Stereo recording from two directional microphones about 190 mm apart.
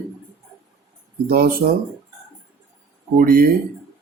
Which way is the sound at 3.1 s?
50° right (ahead or behind).